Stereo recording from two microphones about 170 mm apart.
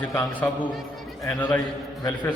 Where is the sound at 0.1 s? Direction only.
15° left (ahead or behind).